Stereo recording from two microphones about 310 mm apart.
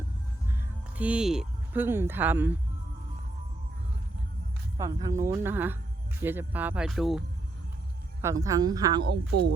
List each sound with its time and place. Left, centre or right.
0.9 s speech: centre
4.8 s speech: centre
8.2 s speech: centre
9.0 s speech: right